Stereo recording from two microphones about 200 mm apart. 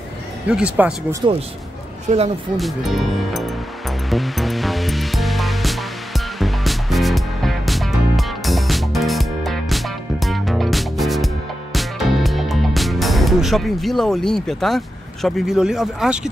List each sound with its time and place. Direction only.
0.5 s speech: 5° right (ahead or behind)
1.2 s speech: 20° right (ahead or behind)
2.5 s speech: centre (ahead or behind)
4.1 s music: centre (ahead or behind)
15.2 s speech: centre (ahead or behind)